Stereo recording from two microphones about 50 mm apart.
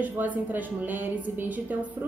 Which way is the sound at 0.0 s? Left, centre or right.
Right.